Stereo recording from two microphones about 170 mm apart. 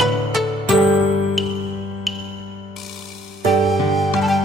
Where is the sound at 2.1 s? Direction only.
Centre (ahead or behind).